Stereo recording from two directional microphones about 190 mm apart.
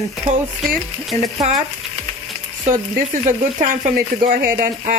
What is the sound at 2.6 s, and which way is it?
Speech, 45° right (ahead or behind).